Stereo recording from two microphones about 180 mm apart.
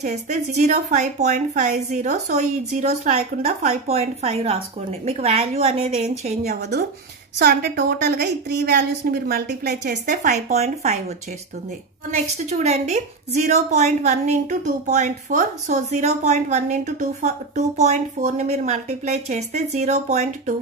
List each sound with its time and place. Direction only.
0.0 s a woman's voice: 40° right (ahead or behind)
7.3 s a woman's voice: 60° right (ahead or behind)
10.5 s a woman's voice: 40° right (ahead or behind)
12.1 s a woman's voice: 40° right (ahead or behind)